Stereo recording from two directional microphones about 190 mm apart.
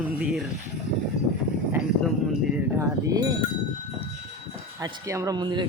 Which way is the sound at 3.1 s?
20° right (ahead or behind).